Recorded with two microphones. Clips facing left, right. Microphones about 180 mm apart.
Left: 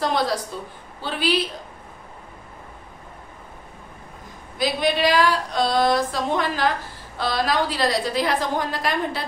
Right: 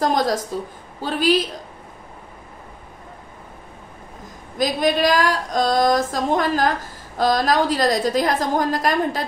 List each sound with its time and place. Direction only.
0.0 s speech: 45° right (ahead or behind)
4.6 s speech: 45° right (ahead or behind)